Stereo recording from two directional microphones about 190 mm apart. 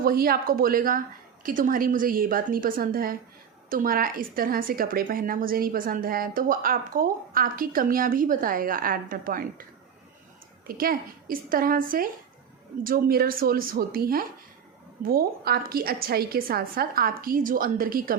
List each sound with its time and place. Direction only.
0.0 s a woman's voice: 50° right (ahead or behind)
10.7 s a woman's voice: 50° right (ahead or behind)